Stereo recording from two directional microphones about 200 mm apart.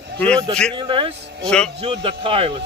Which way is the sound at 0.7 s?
25° right (ahead or behind).